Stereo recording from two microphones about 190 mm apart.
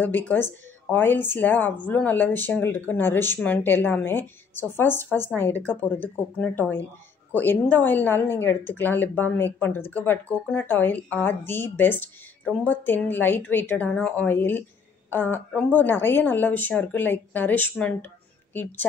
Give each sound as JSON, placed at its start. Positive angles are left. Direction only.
{"t": 0.0, "sound": "a woman's voice", "side_deg": 10}